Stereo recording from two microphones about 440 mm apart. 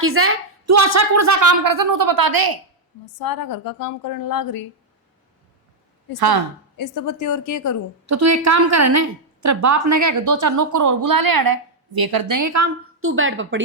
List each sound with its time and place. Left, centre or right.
0.0 s a woman's voice: right
3.2 s a woman's voice: left
6.1 s speech: right
6.7 s a woman's voice: left
8.0 s a woman's voice: right
13.0 s a woman's voice: right